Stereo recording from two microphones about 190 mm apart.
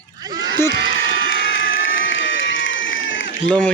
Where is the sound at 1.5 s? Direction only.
85° left.